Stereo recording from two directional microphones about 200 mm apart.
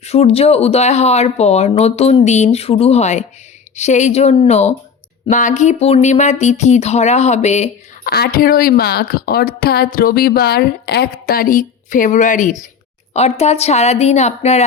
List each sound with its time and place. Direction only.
0.0 s speech: 30° left (ahead or behind)
8.0 s a woman's voice: 50° left (ahead or behind)